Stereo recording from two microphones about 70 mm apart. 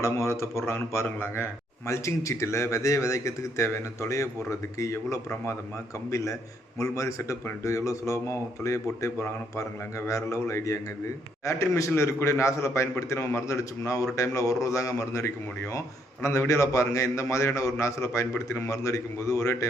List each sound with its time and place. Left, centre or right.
0.0 s a man's voice: left